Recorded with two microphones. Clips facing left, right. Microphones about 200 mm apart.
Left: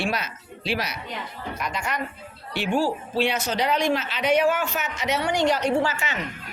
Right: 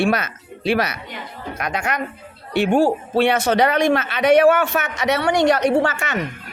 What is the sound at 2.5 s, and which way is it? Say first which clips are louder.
A woman's voice: right 7 dB; 55° right (ahead or behind).